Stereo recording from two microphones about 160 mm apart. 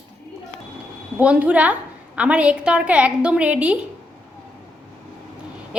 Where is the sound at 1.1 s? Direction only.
10° right (ahead or behind).